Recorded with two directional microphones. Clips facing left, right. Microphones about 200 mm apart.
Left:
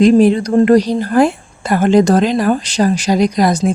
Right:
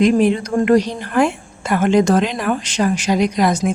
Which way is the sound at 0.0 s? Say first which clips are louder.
Left 5 dB; 35° left (ahead or behind).